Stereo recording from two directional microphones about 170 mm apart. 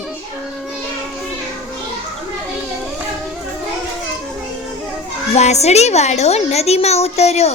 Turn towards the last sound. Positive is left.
turn(degrees=40)  # may be behind; listen again after turning